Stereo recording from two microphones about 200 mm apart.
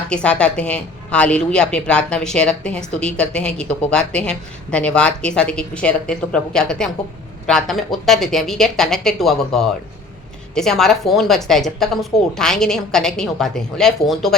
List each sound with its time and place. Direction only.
0.1 s a woman's voice: 5° left (ahead or behind)